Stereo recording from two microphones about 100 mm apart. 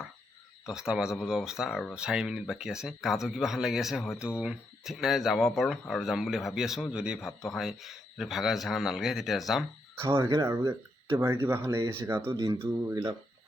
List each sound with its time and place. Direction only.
0.7 s speech: 5° right (ahead or behind)
9.9 s speech: 25° right (ahead or behind)
12.5 s speech: 35° right (ahead or behind)